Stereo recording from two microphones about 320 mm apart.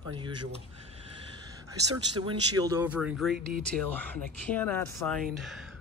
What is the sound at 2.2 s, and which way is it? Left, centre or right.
Speech, centre.